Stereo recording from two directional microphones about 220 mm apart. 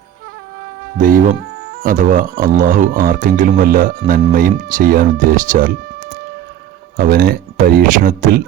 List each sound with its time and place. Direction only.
0.9 s speech: 35° right (ahead or behind)